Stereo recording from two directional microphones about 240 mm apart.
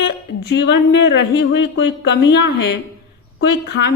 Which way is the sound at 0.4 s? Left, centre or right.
Left.